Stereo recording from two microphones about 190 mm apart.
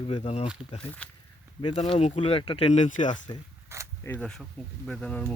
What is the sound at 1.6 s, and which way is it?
Speech, 30° left (ahead or behind).